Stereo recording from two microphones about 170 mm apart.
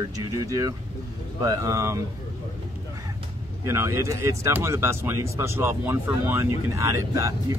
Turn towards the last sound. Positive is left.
turn(degrees=-20)  # may be behind; listen again after turning